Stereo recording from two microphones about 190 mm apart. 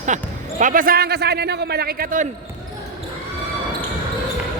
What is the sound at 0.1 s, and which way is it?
A man's voice, 40° right (ahead or behind).